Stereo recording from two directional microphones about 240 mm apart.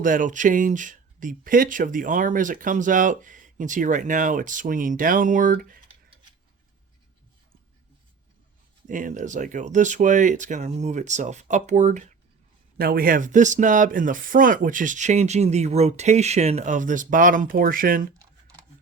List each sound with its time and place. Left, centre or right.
0.0 s speech: right
8.9 s speech: right